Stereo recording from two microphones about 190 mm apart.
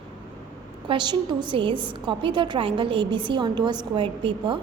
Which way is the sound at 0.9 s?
25° right (ahead or behind).